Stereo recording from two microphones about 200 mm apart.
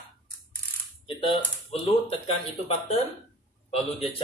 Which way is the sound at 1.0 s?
25° left (ahead or behind).